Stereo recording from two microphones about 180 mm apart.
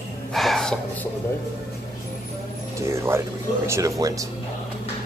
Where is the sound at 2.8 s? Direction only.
15° right (ahead or behind).